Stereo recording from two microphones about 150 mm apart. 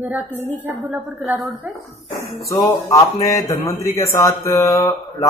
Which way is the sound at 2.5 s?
20° left (ahead or behind).